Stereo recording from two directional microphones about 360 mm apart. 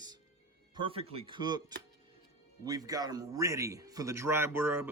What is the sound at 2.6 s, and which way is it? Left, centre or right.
A man's voice, centre.